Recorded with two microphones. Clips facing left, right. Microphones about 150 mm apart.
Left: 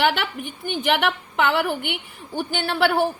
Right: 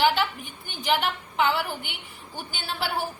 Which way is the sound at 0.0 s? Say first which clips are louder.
Left 1 dB; 65° left (ahead or behind).